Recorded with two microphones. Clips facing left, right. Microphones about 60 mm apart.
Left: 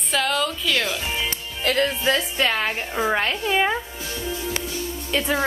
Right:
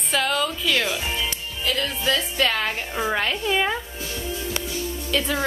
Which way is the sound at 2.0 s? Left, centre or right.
Left.